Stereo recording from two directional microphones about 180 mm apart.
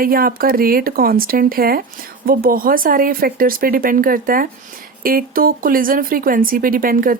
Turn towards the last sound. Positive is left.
turn(degrees=-50)  # may be behind; listen again after turning